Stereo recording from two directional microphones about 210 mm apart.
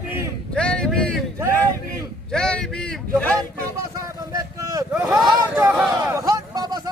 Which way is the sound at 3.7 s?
15° right (ahead or behind).